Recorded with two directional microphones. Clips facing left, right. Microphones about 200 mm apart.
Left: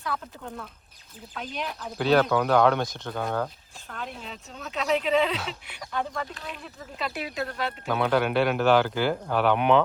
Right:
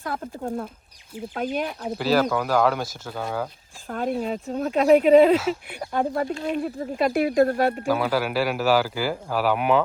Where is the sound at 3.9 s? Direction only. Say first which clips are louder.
Right 12 dB; 45° right (ahead or behind).